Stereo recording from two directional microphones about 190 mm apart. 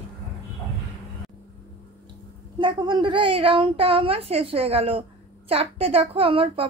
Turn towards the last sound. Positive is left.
turn(degrees=-30)  # may be behind; listen again after turning